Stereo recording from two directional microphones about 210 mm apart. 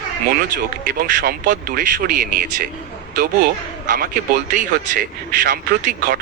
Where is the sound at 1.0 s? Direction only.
40° right (ahead or behind).